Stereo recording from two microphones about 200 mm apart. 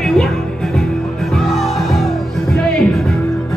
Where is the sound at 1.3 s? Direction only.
Centre (ahead or behind).